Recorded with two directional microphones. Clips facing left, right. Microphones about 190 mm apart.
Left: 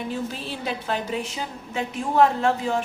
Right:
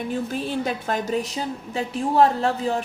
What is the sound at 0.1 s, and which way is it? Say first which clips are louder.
A woman's voice: right 4 dB; 50° right (ahead or behind).